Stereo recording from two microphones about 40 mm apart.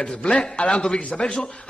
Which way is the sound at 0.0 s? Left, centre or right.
Left.